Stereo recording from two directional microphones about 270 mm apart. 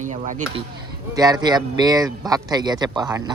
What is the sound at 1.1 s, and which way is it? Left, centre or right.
Speech, centre.